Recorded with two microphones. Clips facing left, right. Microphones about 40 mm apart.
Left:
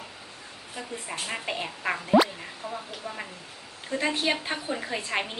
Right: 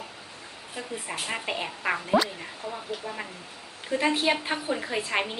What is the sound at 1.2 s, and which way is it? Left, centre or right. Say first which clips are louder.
A woman's voice: right 1 dB; centre.